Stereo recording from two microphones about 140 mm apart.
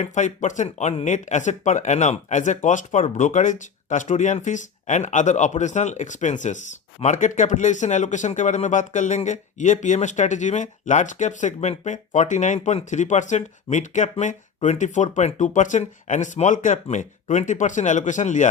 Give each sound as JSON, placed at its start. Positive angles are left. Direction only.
{"t": 0.0, "sound": "speech", "side_deg": 60}